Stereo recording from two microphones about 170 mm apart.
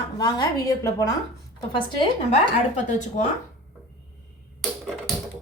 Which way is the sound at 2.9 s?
45° left (ahead or behind).